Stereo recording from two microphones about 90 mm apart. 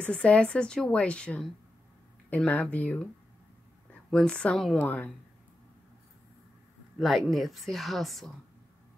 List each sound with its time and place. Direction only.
0.0 s a woman's voice: 10° left (ahead or behind)
4.1 s a woman's voice: 10° left (ahead or behind)
7.0 s speech: centre (ahead or behind)